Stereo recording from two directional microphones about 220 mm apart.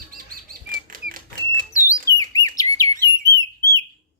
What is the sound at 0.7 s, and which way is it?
Typewriter, 40° right (ahead or behind).